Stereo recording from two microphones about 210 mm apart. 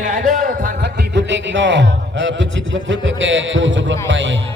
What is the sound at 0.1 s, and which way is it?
A man's voice, 40° right (ahead or behind).